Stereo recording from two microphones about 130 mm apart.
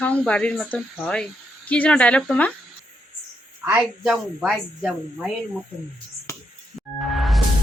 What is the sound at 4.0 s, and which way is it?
Speech, 5° right (ahead or behind).